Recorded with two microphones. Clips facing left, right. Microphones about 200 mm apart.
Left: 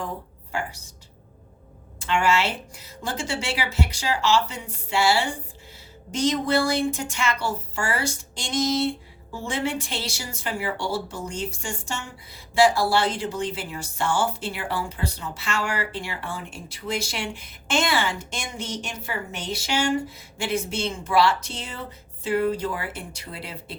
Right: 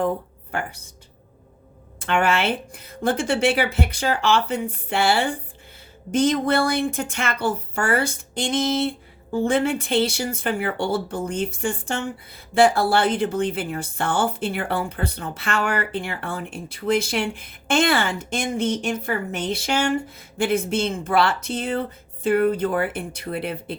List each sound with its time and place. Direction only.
0.5 s speech: 55° right (ahead or behind)
2.0 s speech: 55° right (ahead or behind)